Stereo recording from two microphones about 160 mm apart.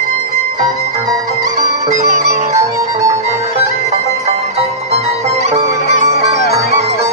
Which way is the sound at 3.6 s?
45° right (ahead or behind).